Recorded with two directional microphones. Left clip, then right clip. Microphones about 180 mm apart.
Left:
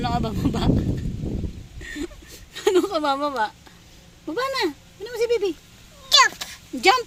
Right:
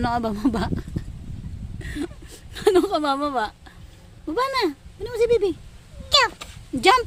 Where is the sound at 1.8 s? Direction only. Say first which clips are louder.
Right 1 dB; 30° right (ahead or behind).